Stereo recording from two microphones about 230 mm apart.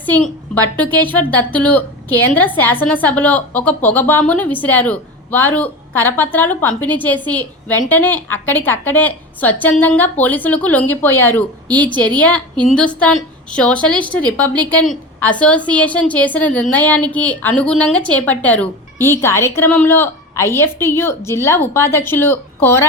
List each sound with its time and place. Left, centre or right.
0.0 s a woman's voice: centre
11.9 s a woman's voice: centre
12.2 s a woman's voice: centre